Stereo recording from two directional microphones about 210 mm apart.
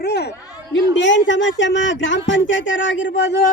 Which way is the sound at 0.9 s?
60° left (ahead or behind).